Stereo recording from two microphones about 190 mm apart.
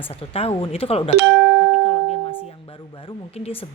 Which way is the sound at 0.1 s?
30° left (ahead or behind).